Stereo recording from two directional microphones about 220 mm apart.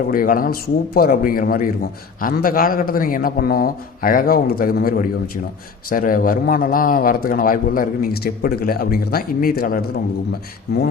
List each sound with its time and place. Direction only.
0.1 s a man's voice: 40° left (ahead or behind)